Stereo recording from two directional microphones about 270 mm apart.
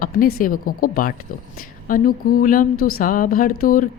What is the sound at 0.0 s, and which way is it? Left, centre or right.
Speech, left.